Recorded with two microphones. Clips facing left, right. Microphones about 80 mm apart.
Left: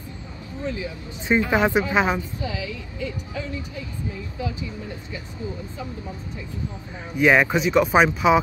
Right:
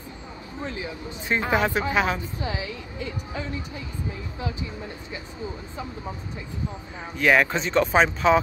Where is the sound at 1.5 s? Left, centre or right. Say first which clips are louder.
Even; centre.